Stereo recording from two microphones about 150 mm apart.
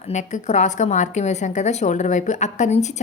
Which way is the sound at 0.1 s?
50° left (ahead or behind).